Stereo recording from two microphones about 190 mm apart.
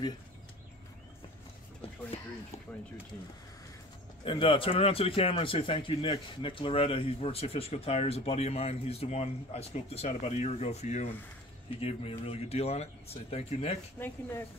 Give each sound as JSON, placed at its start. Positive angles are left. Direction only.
{"t": 4.2, "sound": "a man's voice", "side_deg": 25}
{"t": 13.9, "sound": "speech", "side_deg": 10}